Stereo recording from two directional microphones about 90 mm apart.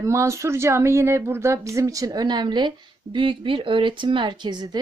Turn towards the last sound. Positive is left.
turn(degrees=-55)  # may be behind; listen again after turning